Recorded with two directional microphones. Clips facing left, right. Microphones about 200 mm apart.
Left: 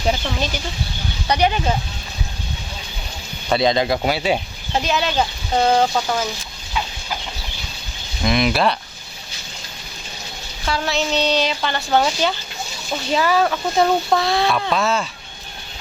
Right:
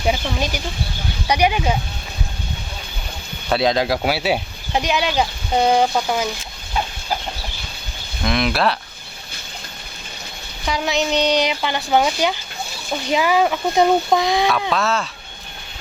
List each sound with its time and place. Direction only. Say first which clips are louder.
0.0 s speech: right 1 dB; 10° right (ahead or behind)
3.5 s speech: left 1 dB; 5° right (ahead or behind)
6.8 s chicken: right 2 dB; 45° right (ahead or behind)
8.2 s speech: left 1 dB; centre (ahead or behind)
10.7 s speech: right 1 dB; 15° right (ahead or behind)
14.7 s speech: left 1 dB; centre (ahead or behind)